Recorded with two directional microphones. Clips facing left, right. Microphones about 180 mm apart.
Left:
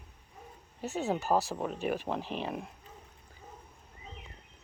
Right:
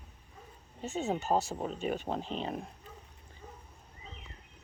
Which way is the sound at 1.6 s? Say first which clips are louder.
Left 1 dB; 75° left (ahead or behind).